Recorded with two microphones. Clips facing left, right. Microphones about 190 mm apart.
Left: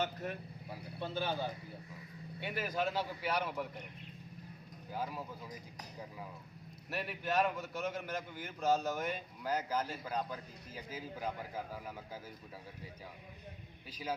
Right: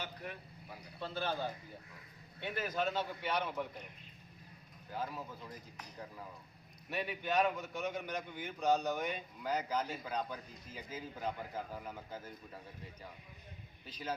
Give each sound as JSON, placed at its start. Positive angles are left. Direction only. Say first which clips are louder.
{"t": 0.0, "sound": "vehicle", "louder": "left 7 dB", "side_deg": 45}
{"t": 1.0, "sound": "a man's voice", "louder": "left 1 dB", "side_deg": 15}
{"t": 4.9, "sound": "speech", "louder": "left 1 dB", "side_deg": 10}
{"t": 6.9, "sound": "a man's voice", "louder": "even", "side_deg": 0}
{"t": 13.8, "sound": "speech", "louder": "even", "side_deg": 10}